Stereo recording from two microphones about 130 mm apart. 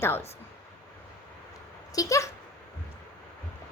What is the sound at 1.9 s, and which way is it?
Speech, 25° left (ahead or behind).